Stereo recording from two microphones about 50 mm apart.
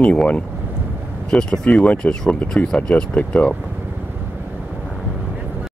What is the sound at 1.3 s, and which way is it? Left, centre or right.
Speech, centre.